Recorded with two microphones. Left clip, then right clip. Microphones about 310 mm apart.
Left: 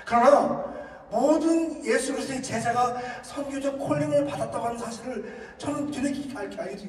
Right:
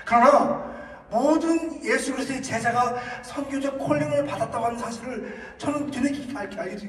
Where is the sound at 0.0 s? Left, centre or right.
Right.